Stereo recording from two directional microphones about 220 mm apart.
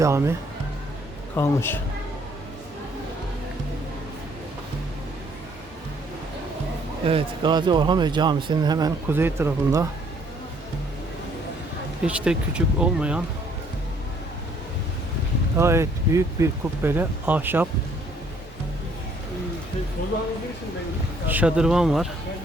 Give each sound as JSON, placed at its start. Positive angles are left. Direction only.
{"t": 0.0, "sound": "speech", "side_deg": -10}
{"t": 1.4, "sound": "a woman's voice", "side_deg": 10}
{"t": 7.0, "sound": "speech", "side_deg": -25}
{"t": 12.0, "sound": "speech", "side_deg": -5}
{"t": 15.5, "sound": "speech", "side_deg": -10}
{"t": 20.0, "sound": "speech", "side_deg": 40}
{"t": 21.2, "sound": "speech", "side_deg": -5}